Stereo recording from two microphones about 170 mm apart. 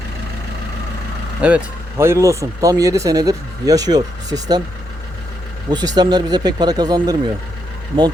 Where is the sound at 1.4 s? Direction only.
5° right (ahead or behind); by 4.6 s 25° right (ahead or behind).